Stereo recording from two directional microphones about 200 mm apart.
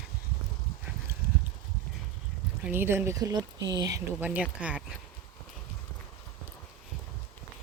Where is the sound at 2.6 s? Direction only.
10° right (ahead or behind).